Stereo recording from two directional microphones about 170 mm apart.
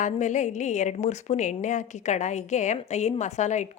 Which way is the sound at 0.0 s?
45° left (ahead or behind).